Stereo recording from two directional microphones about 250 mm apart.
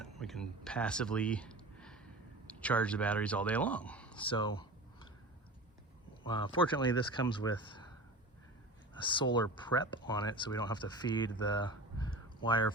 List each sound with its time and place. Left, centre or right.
0.0 s speech: centre
4.2 s a sound: centre
6.2 s speech: centre
9.0 s speech: centre